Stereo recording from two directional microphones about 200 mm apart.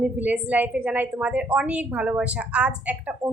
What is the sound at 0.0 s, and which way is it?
A woman's voice, 5° right (ahead or behind).